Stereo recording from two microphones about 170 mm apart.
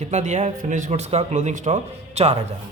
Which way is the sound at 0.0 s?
45° right (ahead or behind).